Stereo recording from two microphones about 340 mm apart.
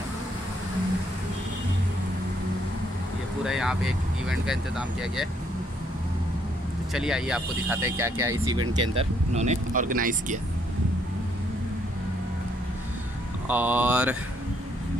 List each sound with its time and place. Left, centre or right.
3.4 s speech: centre
6.9 s speech: centre; by 10.4 s right
13.5 s speech: centre